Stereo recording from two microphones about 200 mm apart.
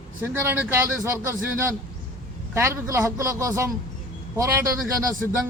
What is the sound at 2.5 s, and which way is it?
Speech, 15° right (ahead or behind).